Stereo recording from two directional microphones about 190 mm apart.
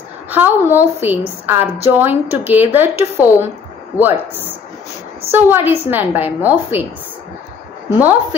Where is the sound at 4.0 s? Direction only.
10° right (ahead or behind).